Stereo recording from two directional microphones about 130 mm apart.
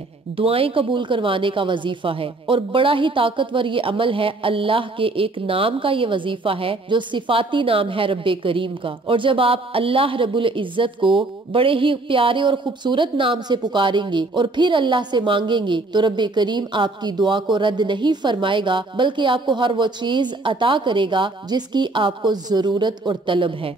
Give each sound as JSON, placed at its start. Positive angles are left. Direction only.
{"t": 0.4, "sound": "a woman's voice", "side_deg": -45}